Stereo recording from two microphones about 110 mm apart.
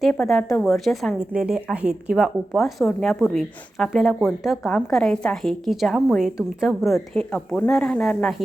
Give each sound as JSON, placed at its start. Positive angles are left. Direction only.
{"t": 0.0, "sound": "speech", "side_deg": 0}